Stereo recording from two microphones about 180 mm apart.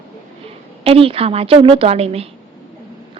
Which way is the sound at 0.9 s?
30° right (ahead or behind).